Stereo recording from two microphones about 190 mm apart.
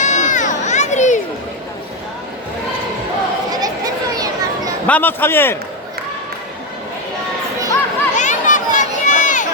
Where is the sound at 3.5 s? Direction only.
20° right (ahead or behind).